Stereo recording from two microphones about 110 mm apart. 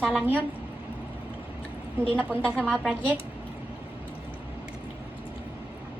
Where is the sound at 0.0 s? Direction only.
Centre (ahead or behind).